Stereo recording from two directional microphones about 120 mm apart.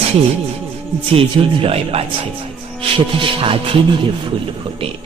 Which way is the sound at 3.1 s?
50° right (ahead or behind).